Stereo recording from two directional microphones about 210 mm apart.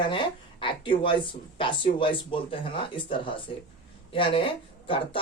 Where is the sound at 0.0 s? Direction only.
25° left (ahead or behind).